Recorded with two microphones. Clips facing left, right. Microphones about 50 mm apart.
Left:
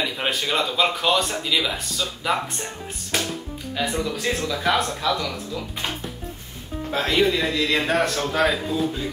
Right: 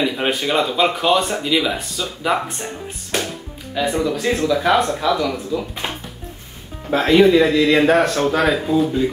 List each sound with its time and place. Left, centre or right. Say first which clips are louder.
0.0 s speech: right 5 dB; centre
4.4 s speech: right 7 dB; centre
6.9 s speech: right 8 dB; centre